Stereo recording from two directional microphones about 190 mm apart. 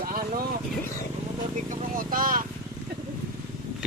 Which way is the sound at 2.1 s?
50° right (ahead or behind).